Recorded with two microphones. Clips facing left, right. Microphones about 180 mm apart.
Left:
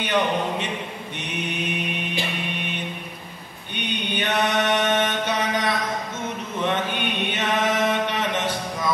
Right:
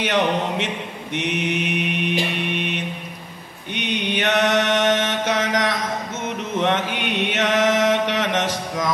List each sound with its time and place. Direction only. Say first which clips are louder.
0.0 s a sound: right 2 dB; 80° right
1.1 s mantra: right 8 dB; 80° right
6.6 s chant: right 2 dB; 90° right